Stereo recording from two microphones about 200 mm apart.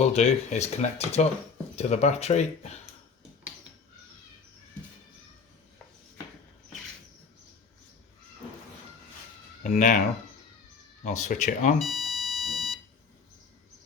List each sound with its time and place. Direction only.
0.0 s speech: 35° left (ahead or behind)
9.6 s speech: 40° left (ahead or behind)
11.0 s speech: 35° left (ahead or behind)
11.8 s alarm clock: centre (ahead or behind)